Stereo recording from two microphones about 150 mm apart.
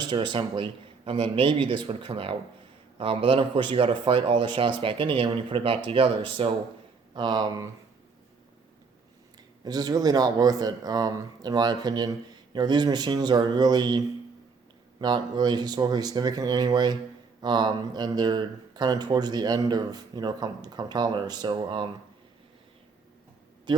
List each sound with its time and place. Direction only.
0.0 s speech: 30° right (ahead or behind)
9.6 s speech: 25° right (ahead or behind)
15.0 s speech: 30° right (ahead or behind)
23.7 s a man's voice: 30° right (ahead or behind)